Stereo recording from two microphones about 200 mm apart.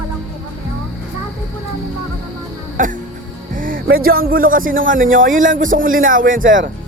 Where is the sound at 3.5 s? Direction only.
45° right (ahead or behind).